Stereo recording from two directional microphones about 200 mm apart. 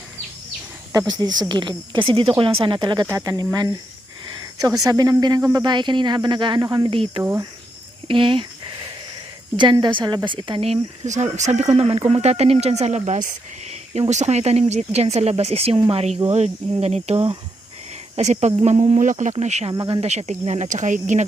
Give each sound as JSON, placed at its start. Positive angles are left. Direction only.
{"t": 1.4, "sound": "speech", "side_deg": -25}
{"t": 4.9, "sound": "speech", "side_deg": -20}
{"t": 7.2, "sound": "speech", "side_deg": -15}
{"t": 8.0, "sound": "a sound", "side_deg": -25}
{"t": 9.6, "sound": "speech", "side_deg": -20}
{"t": 19.7, "sound": "speech", "side_deg": -20}
{"t": 20.0, "sound": "speech", "side_deg": -35}